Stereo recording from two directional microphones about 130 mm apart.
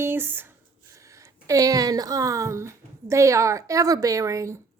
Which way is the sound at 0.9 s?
25° right (ahead or behind).